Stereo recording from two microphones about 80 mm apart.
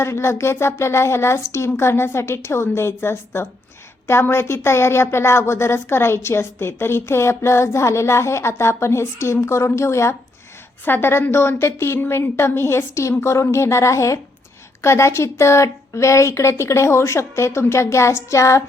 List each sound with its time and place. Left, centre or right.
0.0 s speech: left